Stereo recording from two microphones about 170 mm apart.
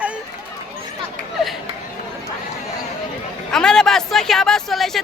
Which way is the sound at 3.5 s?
5° left (ahead or behind).